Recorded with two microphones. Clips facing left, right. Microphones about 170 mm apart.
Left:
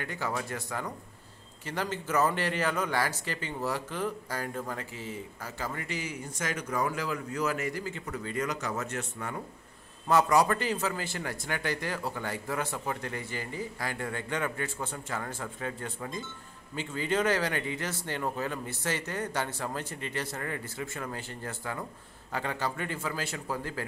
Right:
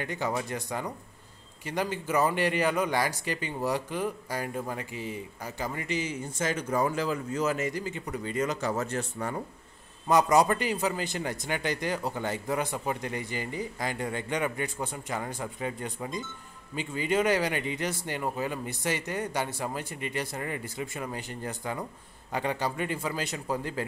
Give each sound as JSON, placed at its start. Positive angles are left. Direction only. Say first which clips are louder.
{"t": 0.0, "sound": "a man's voice", "louder": "right 3 dB", "side_deg": -20}
{"t": 10.0, "sound": "a man's voice", "louder": "right 2 dB", "side_deg": -20}